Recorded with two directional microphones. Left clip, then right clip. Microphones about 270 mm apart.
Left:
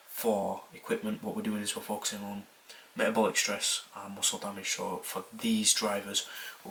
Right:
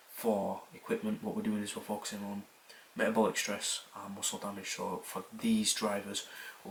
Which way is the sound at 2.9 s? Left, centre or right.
Centre.